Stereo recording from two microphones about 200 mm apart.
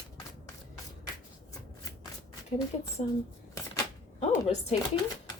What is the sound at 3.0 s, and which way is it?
Speech, 30° left (ahead or behind).